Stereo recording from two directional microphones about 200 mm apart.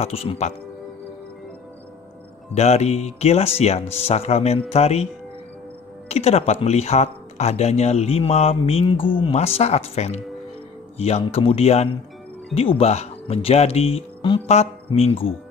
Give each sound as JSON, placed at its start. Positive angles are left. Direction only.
{"t": 0.0, "sound": "speech", "side_deg": 30}
{"t": 2.5, "sound": "speech", "side_deg": 30}
{"t": 6.0, "sound": "speech", "side_deg": 30}